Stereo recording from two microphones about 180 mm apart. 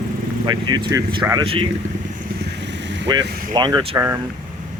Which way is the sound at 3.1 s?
25° right (ahead or behind).